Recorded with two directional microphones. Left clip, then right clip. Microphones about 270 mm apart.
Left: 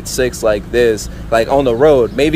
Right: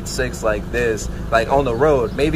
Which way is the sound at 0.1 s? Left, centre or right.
Left.